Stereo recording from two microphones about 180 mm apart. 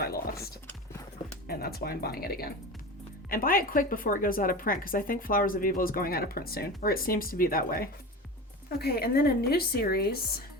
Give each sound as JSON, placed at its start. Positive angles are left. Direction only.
{"t": 0.0, "sound": "typing", "side_deg": 60}
{"t": 1.5, "sound": "a woman's voice", "side_deg": 60}